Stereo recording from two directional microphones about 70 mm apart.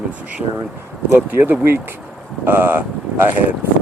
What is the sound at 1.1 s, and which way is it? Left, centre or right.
Speech, right.